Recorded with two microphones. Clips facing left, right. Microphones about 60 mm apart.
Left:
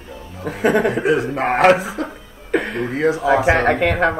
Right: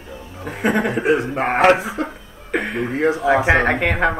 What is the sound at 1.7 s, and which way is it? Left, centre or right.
Speech, right.